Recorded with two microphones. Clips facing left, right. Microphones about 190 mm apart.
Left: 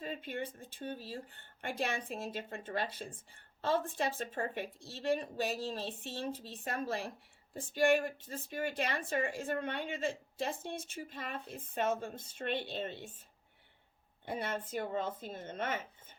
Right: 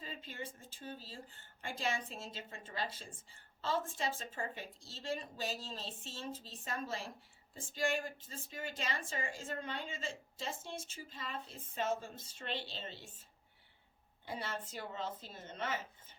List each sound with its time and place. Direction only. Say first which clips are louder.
0.0 s speech: left 7 dB; 60° left (ahead or behind)
14.3 s a woman's voice: left 5 dB; 55° left (ahead or behind)